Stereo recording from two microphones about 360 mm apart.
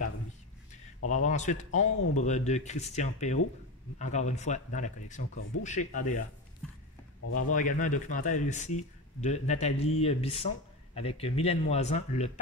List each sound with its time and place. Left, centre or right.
1.2 s speech: centre
7.2 s speech: left
7.5 s speech: left